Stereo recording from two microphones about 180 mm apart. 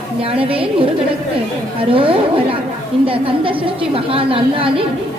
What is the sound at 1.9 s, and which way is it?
A woman's voice, 30° right (ahead or behind).